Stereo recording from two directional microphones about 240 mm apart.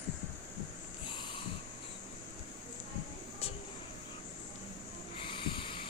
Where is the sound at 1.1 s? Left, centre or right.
Centre.